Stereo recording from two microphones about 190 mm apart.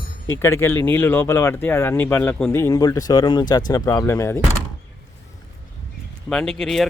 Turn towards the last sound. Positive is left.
turn(degrees=0)  # may be behind; listen again after turning